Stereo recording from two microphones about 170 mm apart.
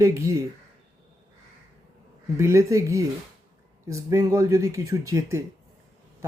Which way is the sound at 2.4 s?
15° right (ahead or behind).